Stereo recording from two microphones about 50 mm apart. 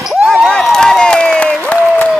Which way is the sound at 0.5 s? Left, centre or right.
Centre.